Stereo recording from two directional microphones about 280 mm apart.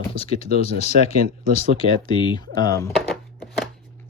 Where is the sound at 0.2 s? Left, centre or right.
Left.